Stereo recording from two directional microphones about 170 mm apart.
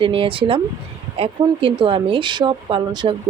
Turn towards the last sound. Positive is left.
turn(degrees=-30)  # may be behind; listen again after turning